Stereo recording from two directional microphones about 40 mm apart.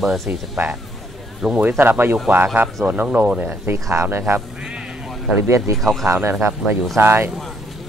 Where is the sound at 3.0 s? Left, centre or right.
Right.